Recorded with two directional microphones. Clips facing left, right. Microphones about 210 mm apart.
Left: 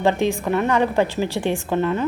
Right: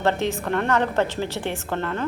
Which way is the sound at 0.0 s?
15° left (ahead or behind).